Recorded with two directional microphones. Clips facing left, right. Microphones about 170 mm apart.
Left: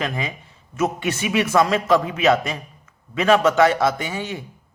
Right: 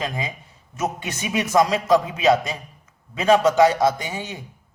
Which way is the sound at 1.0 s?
15° right (ahead or behind).